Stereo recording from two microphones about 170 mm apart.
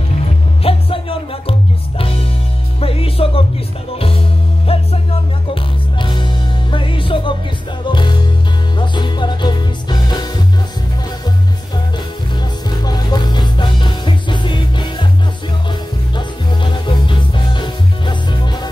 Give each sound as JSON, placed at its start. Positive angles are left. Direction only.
{"t": 0.7, "sound": "music", "side_deg": 35}
{"t": 4.7, "sound": "music", "side_deg": 35}
{"t": 12.6, "sound": "music", "side_deg": 25}
{"t": 16.2, "sound": "music", "side_deg": 30}